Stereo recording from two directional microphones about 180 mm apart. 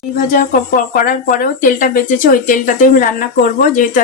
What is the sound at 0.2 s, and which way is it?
Speech, 50° left (ahead or behind).